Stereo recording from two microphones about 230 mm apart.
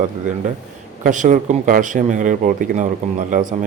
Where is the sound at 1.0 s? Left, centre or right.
Right.